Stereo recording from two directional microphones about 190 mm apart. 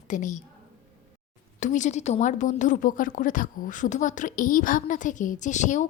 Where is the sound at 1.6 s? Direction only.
40° left (ahead or behind).